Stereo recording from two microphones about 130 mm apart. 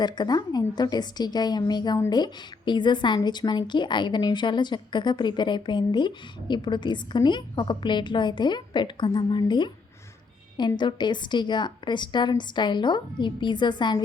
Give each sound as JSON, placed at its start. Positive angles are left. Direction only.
{"t": 0.0, "sound": "a woman's voice", "side_deg": 30}
{"t": 10.8, "sound": "a woman's voice", "side_deg": 35}